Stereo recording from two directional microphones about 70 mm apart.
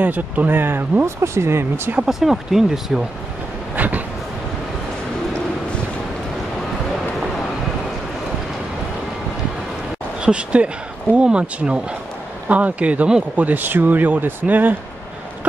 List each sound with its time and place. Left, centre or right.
0.0 s speech: right
2.0 s speech: centre
3.7 s a sound: right
10.2 s speech: centre